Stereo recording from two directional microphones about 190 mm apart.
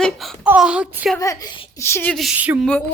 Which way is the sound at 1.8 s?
10° left (ahead or behind).